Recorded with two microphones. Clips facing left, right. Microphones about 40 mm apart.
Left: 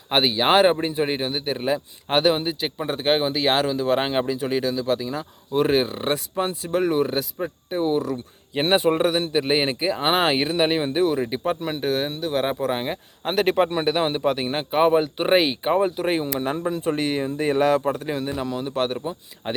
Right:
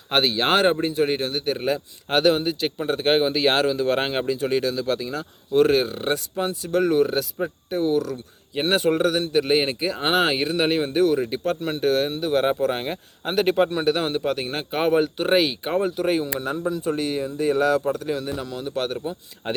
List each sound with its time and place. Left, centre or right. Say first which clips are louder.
0.1 s a man's voice: left 1 dB; centre
2.7 s a man's voice: right 1 dB; centre
7.9 s a man's voice: even; left; by 13.0 s centre
13.2 s a man's voice: even; left; by 15.1 s centre
15.2 s speech: left 1 dB; left
16.0 s speech: even; left
18.9 s a man's voice: even; centre